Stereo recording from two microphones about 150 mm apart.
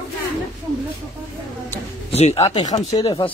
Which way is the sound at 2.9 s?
25° left (ahead or behind).